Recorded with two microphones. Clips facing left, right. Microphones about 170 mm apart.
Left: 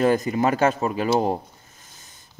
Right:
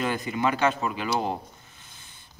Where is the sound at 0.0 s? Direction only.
40° left (ahead or behind).